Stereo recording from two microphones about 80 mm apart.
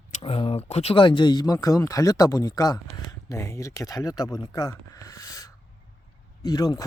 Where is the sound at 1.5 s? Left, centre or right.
Left.